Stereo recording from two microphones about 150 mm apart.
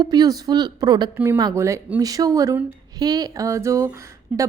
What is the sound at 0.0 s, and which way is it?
Speech, 25° right (ahead or behind).